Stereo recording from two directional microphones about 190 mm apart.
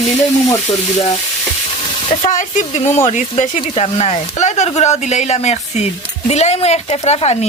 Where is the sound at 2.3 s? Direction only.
45° left (ahead or behind).